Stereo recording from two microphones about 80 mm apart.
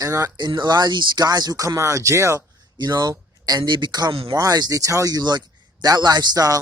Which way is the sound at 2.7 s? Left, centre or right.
Right.